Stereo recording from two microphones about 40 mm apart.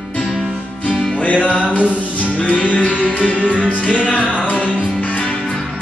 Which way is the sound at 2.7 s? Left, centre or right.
Left.